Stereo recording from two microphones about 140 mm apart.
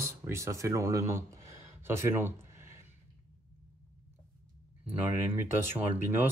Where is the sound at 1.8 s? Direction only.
15° right (ahead or behind).